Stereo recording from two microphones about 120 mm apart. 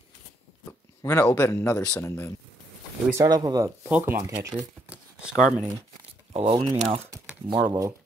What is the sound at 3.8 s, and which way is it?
Speech, 15° right (ahead or behind).